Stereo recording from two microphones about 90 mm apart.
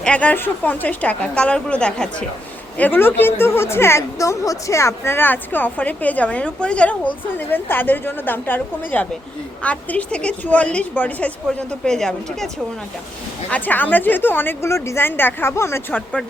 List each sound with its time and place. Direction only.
0.0 s a woman's voice: 15° left (ahead or behind)
11.9 s speech: 5° left (ahead or behind)
13.5 s a woman's voice: 20° left (ahead or behind)